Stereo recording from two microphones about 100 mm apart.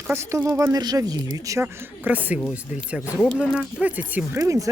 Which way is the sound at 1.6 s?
15° right (ahead or behind).